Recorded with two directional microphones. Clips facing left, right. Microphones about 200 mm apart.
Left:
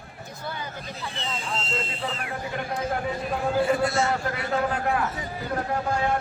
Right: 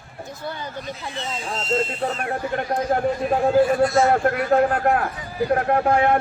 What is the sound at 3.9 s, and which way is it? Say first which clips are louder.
A man's voice: right 8 dB; 50° right (ahead or behind).